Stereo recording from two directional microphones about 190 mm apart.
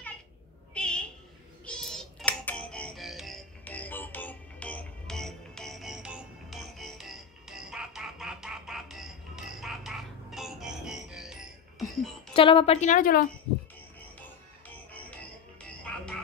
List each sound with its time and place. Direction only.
0.7 s a sound: 5° left (ahead or behind)
1.7 s music: 5° left (ahead or behind)
12.4 s a woman's voice: 25° left (ahead or behind); by 13.3 s 50° left (ahead or behind)